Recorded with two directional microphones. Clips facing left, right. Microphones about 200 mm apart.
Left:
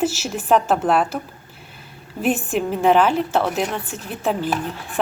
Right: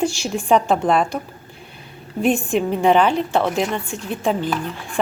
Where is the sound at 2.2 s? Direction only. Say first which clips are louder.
Right 2 dB; 5° left (ahead or behind).